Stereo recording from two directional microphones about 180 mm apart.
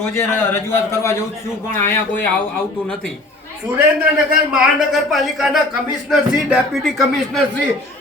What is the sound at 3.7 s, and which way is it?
A man's voice, 5° right (ahead or behind).